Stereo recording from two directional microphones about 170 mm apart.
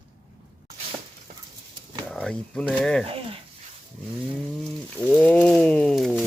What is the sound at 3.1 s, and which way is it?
Speech, 35° right (ahead or behind).